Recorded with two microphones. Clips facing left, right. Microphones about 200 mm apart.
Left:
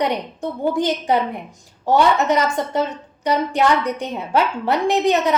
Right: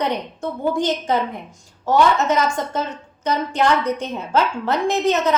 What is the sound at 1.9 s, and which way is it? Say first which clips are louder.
A woman's voice: left 1 dB; 15° left (ahead or behind).